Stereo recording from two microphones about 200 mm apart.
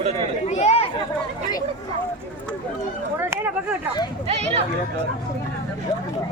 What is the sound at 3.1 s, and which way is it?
Speech, 10° right (ahead or behind).